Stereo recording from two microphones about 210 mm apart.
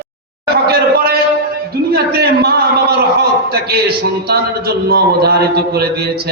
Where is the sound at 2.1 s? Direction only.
50° right (ahead or behind).